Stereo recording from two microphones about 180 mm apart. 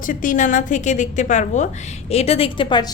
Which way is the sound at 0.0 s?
50° left (ahead or behind).